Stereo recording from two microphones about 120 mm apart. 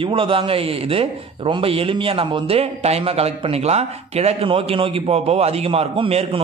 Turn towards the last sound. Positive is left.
turn(degrees=-55)  # may be behind; listen again after turning